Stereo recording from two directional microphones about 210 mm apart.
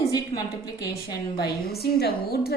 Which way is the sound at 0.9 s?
50° left (ahead or behind).